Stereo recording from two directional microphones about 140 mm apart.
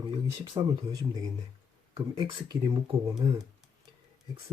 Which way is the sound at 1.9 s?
30° right (ahead or behind).